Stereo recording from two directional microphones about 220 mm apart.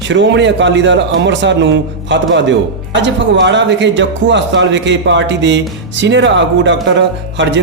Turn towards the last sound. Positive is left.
turn(degrees=-55)  # may be behind; listen again after turning